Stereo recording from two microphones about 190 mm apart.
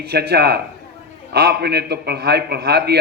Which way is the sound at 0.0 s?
60° right (ahead or behind).